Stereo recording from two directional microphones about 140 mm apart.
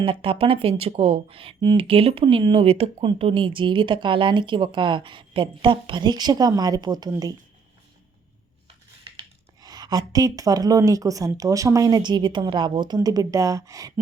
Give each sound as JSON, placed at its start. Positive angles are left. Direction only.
{"t": 0.0, "sound": "speech", "side_deg": -40}
{"t": 9.0, "sound": "speech", "side_deg": -35}